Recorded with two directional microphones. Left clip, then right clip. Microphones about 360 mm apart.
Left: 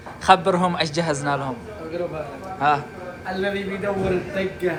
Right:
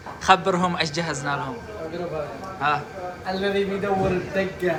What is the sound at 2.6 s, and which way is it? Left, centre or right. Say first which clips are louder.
Speech: left 4 dB; centre.